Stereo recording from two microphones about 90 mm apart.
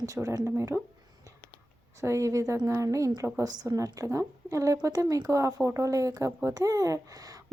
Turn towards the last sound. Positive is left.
turn(degrees=-45)  # may be behind; listen again after turning